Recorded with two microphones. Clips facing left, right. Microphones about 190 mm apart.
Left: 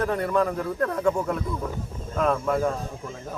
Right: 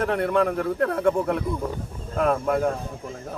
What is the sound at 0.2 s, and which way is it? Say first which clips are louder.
Speech: right 2 dB; 60° right (ahead or behind).